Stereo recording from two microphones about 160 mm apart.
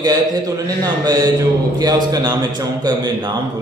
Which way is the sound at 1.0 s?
25° right (ahead or behind).